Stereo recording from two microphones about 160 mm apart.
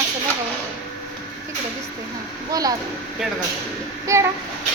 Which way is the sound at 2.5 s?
25° right (ahead or behind).